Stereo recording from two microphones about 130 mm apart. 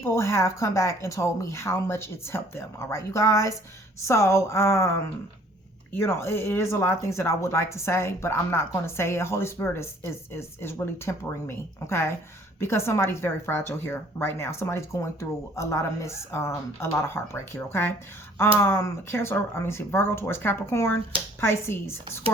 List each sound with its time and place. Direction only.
0.0 s speech: 20° left (ahead or behind)